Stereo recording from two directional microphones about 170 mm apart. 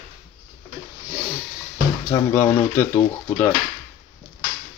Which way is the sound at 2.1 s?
15° left (ahead or behind).